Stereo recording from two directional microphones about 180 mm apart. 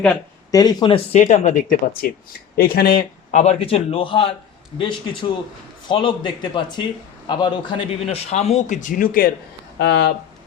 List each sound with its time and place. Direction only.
0.5 s speech: 20° left (ahead or behind)
1.2 s speech: 45° left (ahead or behind)
2.6 s speech: 55° left (ahead or behind)
3.3 s speech: 35° left (ahead or behind); by 9.3 s 50° left (ahead or behind)
9.7 s speech: 70° left (ahead or behind)